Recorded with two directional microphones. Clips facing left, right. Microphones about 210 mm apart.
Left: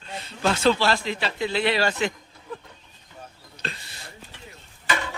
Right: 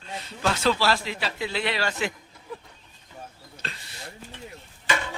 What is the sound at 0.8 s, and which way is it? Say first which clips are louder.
Speech: left 1 dB; 5° right (ahead or behind).